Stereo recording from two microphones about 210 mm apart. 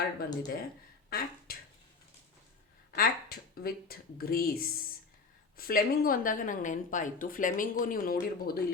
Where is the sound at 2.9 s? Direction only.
45° left (ahead or behind).